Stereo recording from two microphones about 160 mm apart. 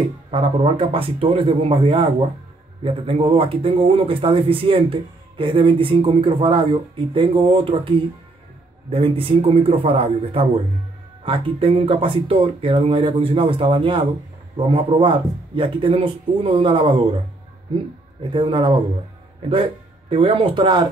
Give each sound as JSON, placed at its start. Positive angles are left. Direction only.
{"t": 0.3, "sound": "speech", "side_deg": -35}
{"t": 8.9, "sound": "speech", "side_deg": -35}
{"t": 18.3, "sound": "speech", "side_deg": -35}